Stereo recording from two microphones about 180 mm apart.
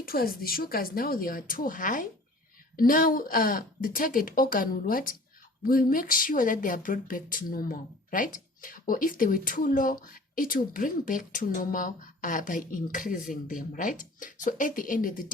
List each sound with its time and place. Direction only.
0.0 s speech: 55° left (ahead or behind)